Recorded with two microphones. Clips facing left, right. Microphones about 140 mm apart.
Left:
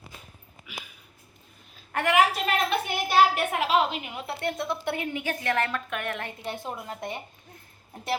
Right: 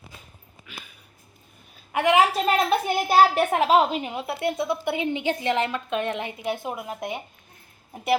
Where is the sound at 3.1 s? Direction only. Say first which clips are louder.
Right 3 dB; 40° right (ahead or behind).